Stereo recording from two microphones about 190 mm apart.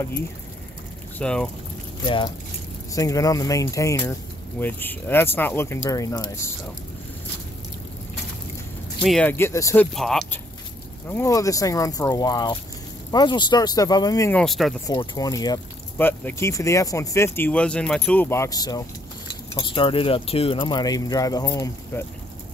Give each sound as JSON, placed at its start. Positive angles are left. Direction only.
{"t": 1.1, "sound": "speech", "side_deg": 5}
{"t": 2.0, "sound": "speech", "side_deg": 25}
{"t": 9.0, "sound": "speech", "side_deg": 5}
{"t": 9.9, "sound": "speech", "side_deg": 0}
{"t": 11.1, "sound": "speech", "side_deg": 15}
{"t": 14.3, "sound": "speech", "side_deg": 0}
{"t": 14.9, "sound": "speech", "side_deg": 20}